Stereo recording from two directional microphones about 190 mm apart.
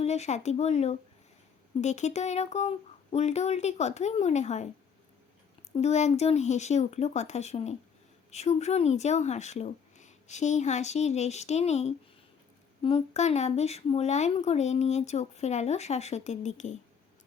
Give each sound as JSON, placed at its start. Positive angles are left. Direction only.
{"t": 0.0, "sound": "speech", "side_deg": 35}
{"t": 5.7, "sound": "speech", "side_deg": 35}